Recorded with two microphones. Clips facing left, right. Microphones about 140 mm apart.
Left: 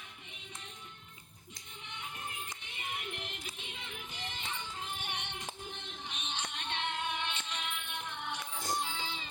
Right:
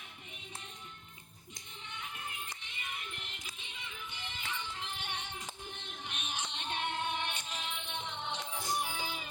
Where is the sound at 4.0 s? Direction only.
35° left (ahead or behind).